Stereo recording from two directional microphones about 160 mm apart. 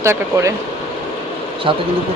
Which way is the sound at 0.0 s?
15° right (ahead or behind).